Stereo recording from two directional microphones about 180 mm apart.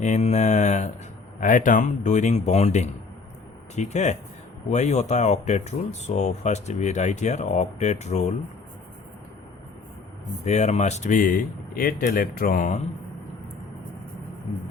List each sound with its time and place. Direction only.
0.0 s speech: 40° left (ahead or behind)
10.4 s speech: 40° left (ahead or behind)